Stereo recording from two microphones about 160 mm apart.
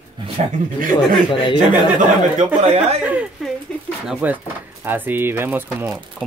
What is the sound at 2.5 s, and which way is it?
Speech, 40° right (ahead or behind).